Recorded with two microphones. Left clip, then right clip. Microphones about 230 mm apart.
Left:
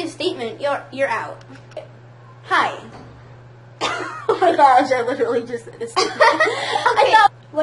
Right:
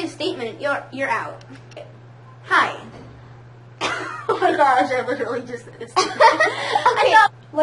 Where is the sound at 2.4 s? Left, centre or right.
Left.